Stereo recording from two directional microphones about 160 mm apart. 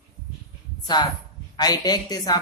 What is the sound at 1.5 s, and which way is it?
Speech, 25° left (ahead or behind).